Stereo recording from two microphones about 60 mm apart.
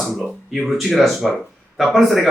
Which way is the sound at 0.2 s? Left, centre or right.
Centre.